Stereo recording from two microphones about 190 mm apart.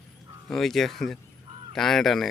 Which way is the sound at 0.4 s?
Centre (ahead or behind).